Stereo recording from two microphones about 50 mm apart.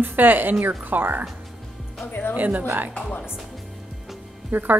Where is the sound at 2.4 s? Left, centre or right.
Right.